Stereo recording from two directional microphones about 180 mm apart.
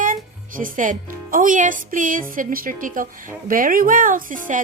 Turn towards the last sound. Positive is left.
turn(degrees=-45)  # may be behind; listen again after turning